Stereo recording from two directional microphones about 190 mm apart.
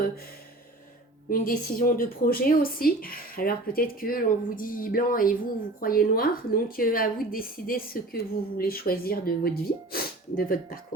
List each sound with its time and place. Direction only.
1.3 s a woman's voice: 45° left (ahead or behind)